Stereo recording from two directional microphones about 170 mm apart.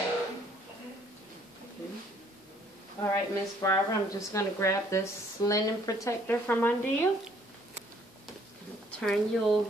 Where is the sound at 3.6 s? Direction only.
20° left (ahead or behind).